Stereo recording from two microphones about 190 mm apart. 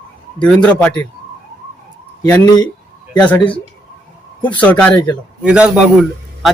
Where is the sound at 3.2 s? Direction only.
5° left (ahead or behind).